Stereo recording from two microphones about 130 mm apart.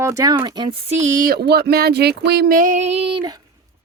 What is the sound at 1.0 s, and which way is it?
Speech, 85° right.